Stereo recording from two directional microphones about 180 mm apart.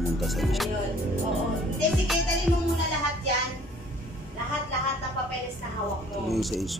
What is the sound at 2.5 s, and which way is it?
Speech, centre (ahead or behind).